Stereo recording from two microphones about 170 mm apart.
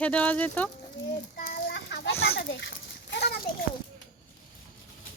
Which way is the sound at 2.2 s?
80° left.